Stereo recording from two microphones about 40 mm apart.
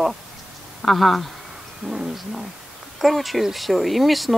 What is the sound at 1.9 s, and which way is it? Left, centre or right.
Speech, centre.